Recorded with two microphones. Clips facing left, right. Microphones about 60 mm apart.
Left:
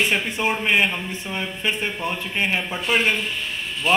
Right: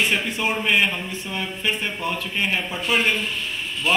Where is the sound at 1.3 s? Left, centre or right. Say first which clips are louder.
Even; left.